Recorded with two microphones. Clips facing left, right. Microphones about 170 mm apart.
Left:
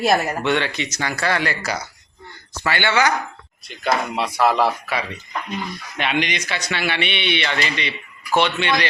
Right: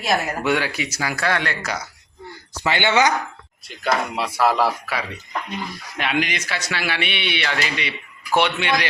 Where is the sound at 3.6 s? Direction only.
5° right (ahead or behind).